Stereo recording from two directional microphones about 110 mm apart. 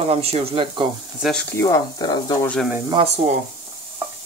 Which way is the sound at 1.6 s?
35° left (ahead or behind).